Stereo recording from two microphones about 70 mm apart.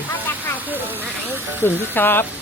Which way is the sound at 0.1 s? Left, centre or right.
Left.